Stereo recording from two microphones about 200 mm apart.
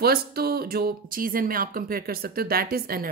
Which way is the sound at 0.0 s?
50° right (ahead or behind).